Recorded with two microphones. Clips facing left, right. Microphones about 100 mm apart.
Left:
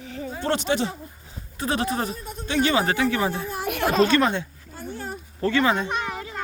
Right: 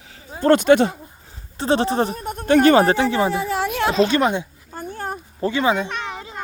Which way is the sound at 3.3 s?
90° right.